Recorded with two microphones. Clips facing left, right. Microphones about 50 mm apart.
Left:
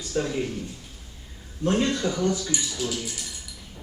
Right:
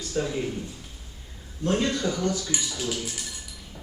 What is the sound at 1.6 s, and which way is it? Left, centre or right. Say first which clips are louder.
Speech: left 1 dB; centre.